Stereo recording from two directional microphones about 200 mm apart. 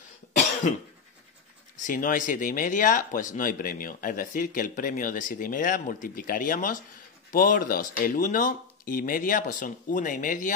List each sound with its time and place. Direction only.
1.8 s speech: 40° left (ahead or behind)